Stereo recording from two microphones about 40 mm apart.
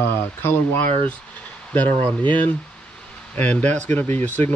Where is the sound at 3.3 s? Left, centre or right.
Left.